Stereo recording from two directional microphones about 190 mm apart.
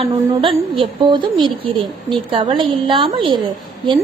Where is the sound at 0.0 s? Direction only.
25° right (ahead or behind).